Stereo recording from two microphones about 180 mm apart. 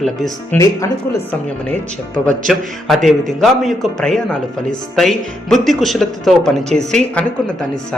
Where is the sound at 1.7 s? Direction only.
5° left (ahead or behind).